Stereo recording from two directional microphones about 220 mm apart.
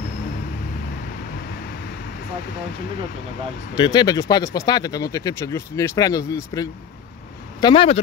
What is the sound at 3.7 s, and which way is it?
Speech, 20° left (ahead or behind).